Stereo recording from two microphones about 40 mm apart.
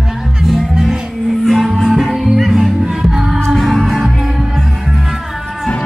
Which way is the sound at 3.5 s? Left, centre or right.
Centre.